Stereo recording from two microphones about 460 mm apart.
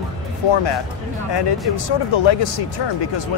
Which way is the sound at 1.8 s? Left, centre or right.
Left.